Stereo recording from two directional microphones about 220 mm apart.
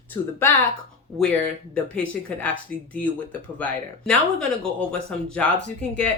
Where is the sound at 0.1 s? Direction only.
10° left (ahead or behind).